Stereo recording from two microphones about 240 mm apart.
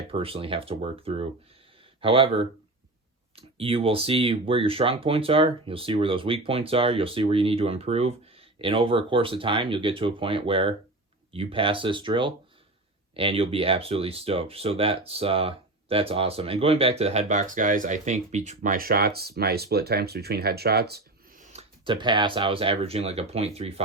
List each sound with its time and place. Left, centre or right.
0.1 s speech: right